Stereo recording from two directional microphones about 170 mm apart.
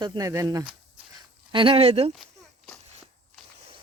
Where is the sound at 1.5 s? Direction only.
30° right (ahead or behind).